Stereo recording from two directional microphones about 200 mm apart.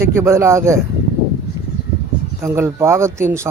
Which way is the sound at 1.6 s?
20° right (ahead or behind).